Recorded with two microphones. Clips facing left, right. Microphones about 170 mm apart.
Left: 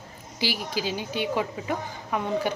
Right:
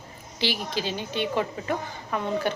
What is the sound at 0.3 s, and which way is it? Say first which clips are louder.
A woman's voice: right 1 dB; 10° left (ahead or behind).